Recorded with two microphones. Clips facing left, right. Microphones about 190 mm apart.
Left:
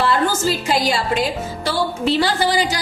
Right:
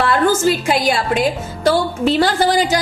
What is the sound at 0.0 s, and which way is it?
A woman's voice, 55° right (ahead or behind).